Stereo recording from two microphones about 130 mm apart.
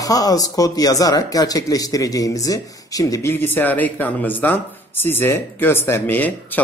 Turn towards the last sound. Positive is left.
turn(degrees=15)  # may be behind; listen again after turning